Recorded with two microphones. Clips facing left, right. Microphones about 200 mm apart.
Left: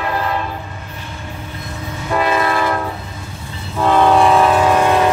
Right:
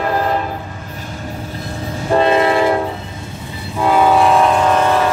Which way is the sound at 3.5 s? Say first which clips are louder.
Even; 10° right (ahead or behind).